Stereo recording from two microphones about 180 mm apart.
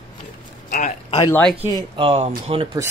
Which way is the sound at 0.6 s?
45° left (ahead or behind).